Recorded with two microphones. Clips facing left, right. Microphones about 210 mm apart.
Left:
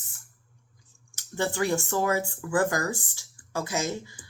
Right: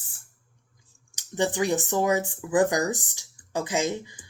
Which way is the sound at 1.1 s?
15° right (ahead or behind).